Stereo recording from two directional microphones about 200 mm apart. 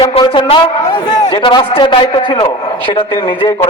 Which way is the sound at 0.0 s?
25° left (ahead or behind).